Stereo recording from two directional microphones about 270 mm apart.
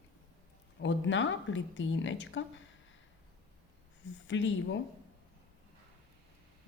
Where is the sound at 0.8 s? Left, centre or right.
Left.